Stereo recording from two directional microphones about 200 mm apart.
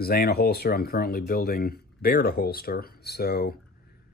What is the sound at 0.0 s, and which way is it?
Speech, 50° left (ahead or behind).